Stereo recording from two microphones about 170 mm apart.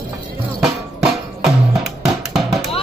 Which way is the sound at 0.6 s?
Centre (ahead or behind).